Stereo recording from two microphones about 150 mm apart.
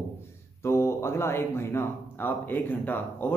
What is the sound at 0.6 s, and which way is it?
Speech, 20° left (ahead or behind).